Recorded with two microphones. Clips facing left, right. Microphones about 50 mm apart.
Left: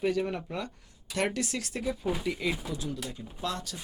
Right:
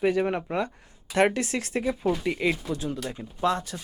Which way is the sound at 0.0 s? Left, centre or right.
Right.